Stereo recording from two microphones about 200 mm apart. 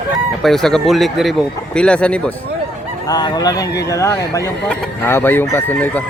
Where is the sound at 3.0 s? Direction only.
20° left (ahead or behind).